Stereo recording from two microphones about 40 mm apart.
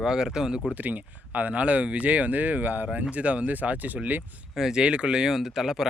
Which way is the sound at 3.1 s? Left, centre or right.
Right.